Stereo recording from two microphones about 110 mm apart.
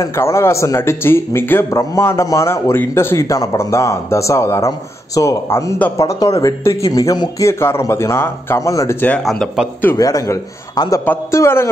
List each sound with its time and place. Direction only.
0.0 s a man's voice: 25° left (ahead or behind)
9.2 s speech: centre (ahead or behind)
9.9 s a man's voice: 30° left (ahead or behind)